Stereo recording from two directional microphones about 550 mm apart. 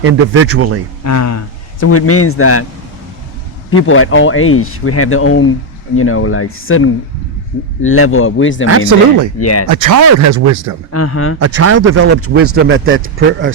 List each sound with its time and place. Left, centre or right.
0.0 s speech: right
1.0 s speech: left
3.7 s speech: left
8.9 s speech: right
9.4 s speech: left
9.6 s speech: right
10.9 s speech: left
11.3 s speech: right